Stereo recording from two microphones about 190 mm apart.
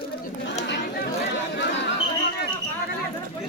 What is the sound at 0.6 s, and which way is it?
Chatter, 65° left (ahead or behind).